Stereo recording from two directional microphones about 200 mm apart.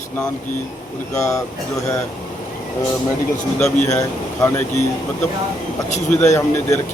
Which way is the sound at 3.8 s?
15° left (ahead or behind).